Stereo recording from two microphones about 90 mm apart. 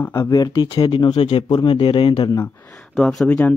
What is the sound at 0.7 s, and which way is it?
Speech, 80° left.